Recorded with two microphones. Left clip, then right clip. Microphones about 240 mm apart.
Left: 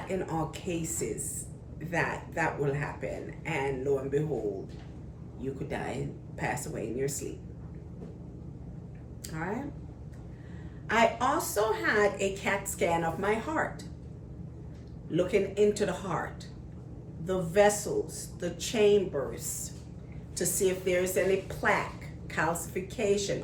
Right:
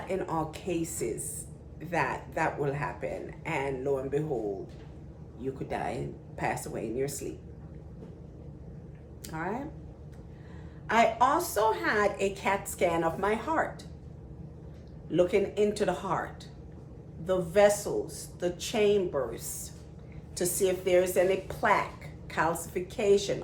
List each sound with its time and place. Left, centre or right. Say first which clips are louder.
0.1 s a woman's voice: right 2 dB; centre
5.4 s a woman's voice: right 2 dB; centre
9.2 s speech: right 1 dB; centre
10.8 s a woman's voice: right 2 dB; centre
15.1 s a woman's voice: right 2 dB; centre
17.2 s a woman's voice: right 1 dB; centre